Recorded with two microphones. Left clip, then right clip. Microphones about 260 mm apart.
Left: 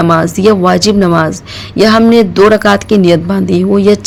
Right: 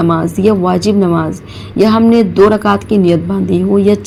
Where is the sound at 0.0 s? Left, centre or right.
Left.